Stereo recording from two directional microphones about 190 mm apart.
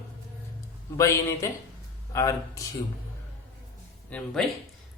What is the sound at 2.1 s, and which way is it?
Speech, 15° left (ahead or behind).